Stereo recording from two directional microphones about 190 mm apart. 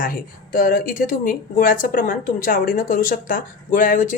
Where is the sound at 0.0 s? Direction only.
50° left (ahead or behind).